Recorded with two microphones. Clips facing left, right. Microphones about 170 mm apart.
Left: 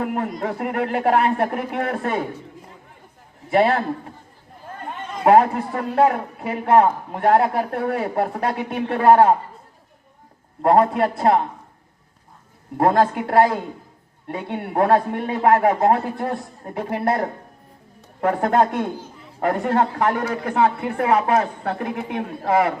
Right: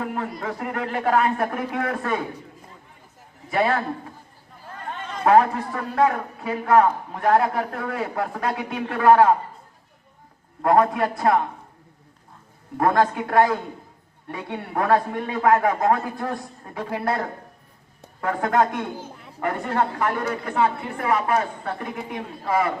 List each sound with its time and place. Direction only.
0.4 s a man's voice: 30° left (ahead or behind)
3.5 s a man's voice: 30° left (ahead or behind)
5.2 s a man's voice: 30° left (ahead or behind)
10.6 s a man's voice: 30° left (ahead or behind)
12.7 s a man's voice: 30° left (ahead or behind)
18.3 s a man's voice: 30° left (ahead or behind)
19.5 s speech: 45° left (ahead or behind)